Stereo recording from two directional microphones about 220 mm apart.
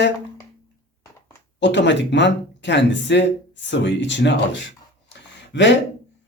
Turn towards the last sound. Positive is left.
turn(degrees=55)  # may be behind; listen again after turning